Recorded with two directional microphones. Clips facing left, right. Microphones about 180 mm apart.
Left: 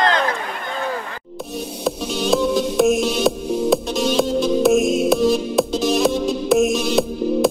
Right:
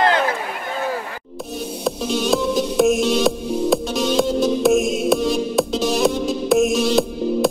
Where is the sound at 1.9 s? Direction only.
Centre (ahead or behind).